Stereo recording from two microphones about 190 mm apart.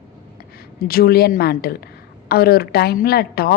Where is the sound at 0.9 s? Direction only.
50° left (ahead or behind).